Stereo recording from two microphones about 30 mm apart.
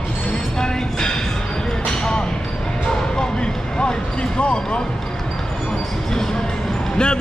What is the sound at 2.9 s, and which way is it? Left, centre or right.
Bow-wow, left.